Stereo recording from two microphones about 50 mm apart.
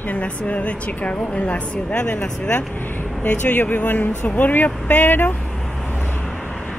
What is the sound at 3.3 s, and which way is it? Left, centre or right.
Speech, left.